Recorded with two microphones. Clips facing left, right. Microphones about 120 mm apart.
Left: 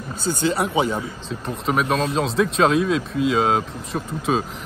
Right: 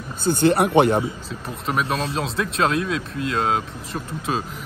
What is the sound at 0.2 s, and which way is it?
Speech, 55° right (ahead or behind).